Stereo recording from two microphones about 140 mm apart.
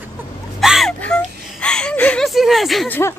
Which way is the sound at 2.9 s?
20° left (ahead or behind).